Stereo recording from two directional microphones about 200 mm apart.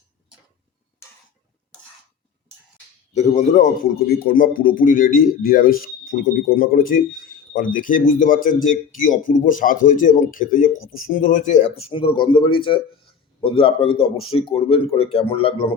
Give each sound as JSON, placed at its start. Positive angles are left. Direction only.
{"t": 3.1, "sound": "speech", "side_deg": 35}
{"t": 10.8, "sound": "speech", "side_deg": 90}
{"t": 11.1, "sound": "speech", "side_deg": 40}